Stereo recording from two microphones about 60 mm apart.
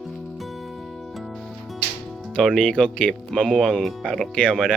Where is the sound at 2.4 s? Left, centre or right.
Centre.